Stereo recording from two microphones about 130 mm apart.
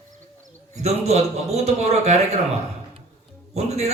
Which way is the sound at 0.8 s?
55° right (ahead or behind).